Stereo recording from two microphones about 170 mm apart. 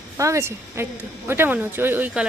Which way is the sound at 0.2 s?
20° right (ahead or behind).